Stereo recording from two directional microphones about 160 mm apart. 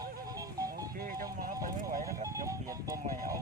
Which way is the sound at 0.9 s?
65° right (ahead or behind).